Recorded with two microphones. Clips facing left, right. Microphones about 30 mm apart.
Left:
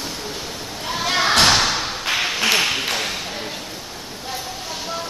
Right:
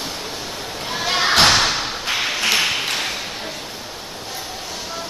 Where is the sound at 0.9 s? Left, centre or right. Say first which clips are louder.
Even; centre.